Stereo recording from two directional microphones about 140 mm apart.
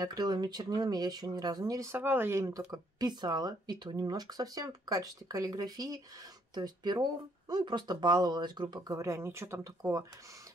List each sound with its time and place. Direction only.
0.0 s speech: 30° right (ahead or behind)